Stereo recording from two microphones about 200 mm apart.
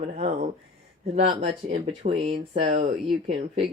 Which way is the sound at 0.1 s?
35° right (ahead or behind).